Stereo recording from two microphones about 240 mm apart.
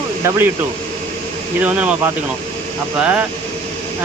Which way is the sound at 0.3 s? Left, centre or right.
Centre.